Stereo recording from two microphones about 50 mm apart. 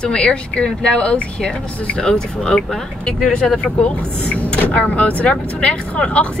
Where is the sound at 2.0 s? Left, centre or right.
Centre.